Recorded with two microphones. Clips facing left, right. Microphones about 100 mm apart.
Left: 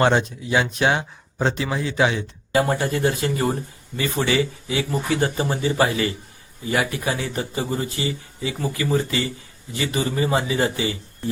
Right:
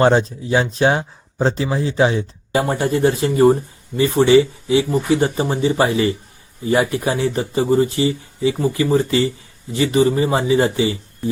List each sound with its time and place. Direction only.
0.0 s speech: 30° right (ahead or behind)
2.5 s speech: 25° right (ahead or behind)